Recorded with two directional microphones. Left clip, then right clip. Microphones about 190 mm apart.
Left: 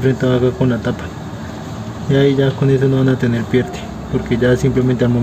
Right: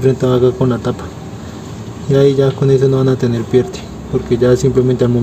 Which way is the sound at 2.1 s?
15° right (ahead or behind).